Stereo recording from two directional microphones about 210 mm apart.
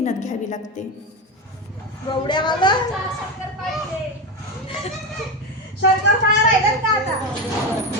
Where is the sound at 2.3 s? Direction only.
20° left (ahead or behind).